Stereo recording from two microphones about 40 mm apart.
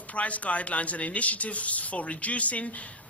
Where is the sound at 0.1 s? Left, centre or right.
Left.